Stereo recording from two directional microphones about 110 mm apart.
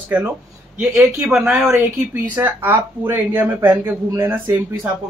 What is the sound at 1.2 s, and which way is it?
Speech, 5° right (ahead or behind).